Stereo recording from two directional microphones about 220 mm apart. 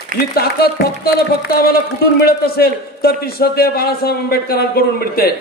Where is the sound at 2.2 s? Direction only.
45° left (ahead or behind).